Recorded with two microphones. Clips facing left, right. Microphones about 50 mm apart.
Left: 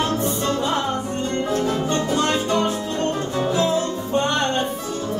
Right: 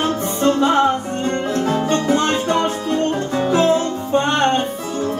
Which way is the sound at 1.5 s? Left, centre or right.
Right.